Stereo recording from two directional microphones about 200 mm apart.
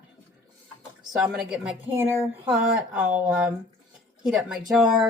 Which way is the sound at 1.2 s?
Centre (ahead or behind).